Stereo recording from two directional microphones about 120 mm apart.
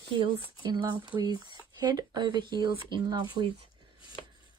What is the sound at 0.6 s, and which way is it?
Speech, 35° right (ahead or behind).